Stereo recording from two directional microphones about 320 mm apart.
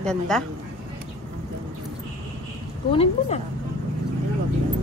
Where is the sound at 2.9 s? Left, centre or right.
Centre.